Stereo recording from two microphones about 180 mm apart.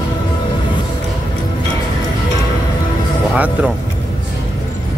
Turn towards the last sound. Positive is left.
turn(degrees=-5)  # may be behind; listen again after turning